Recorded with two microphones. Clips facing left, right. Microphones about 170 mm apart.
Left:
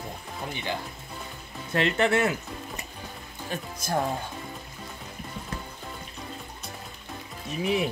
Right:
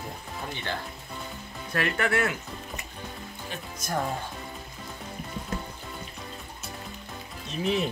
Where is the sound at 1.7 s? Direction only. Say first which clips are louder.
Left 3 dB; 25° left (ahead or behind).